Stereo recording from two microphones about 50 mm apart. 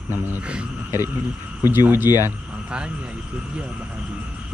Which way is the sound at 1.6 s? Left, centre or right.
Right.